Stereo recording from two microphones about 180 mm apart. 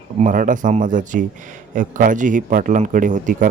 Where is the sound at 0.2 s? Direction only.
45° right (ahead or behind).